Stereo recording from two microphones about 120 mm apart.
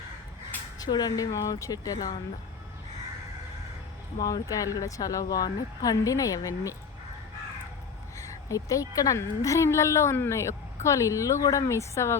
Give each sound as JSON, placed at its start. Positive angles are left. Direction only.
{"t": 0.8, "sound": "speech", "side_deg": 35}
{"t": 4.2, "sound": "speech", "side_deg": 30}
{"t": 8.2, "sound": "speech", "side_deg": 30}